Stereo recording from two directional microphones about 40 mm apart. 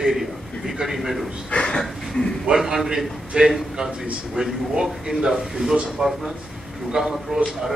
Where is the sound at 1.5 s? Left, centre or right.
Left.